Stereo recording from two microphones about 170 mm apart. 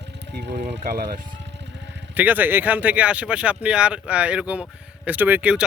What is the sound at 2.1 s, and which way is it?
Speech, 10° right (ahead or behind).